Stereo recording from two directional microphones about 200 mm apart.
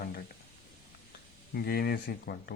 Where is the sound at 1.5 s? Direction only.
50° left (ahead or behind).